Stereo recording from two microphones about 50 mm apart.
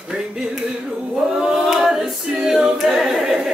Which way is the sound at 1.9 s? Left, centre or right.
Centre.